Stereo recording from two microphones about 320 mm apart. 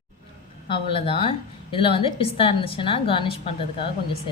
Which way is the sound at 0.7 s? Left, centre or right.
Centre.